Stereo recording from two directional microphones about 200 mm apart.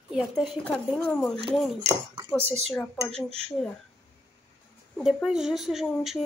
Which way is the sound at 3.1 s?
30° right (ahead or behind).